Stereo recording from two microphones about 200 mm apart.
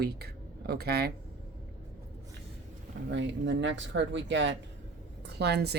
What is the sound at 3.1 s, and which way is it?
A woman's voice, 70° right (ahead or behind).